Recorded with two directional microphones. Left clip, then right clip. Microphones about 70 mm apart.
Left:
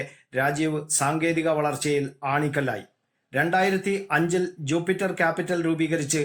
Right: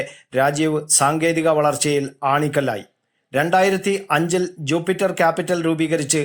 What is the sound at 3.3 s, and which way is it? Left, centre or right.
Speech, right.